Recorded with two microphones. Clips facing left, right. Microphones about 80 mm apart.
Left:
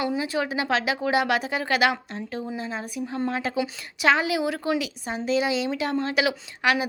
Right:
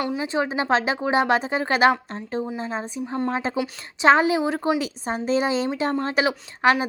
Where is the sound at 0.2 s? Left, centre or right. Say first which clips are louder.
Right 2 dB; right.